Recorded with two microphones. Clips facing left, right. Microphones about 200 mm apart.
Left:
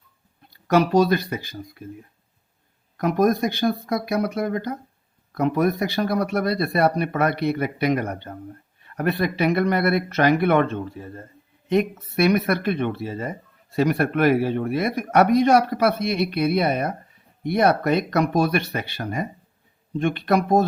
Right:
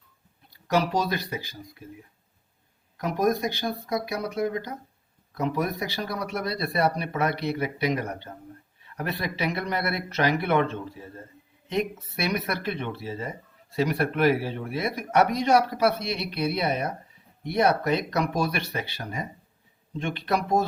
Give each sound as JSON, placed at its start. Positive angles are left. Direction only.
{"t": 0.7, "sound": "speech", "side_deg": 55}
{"t": 3.0, "sound": "speech", "side_deg": 55}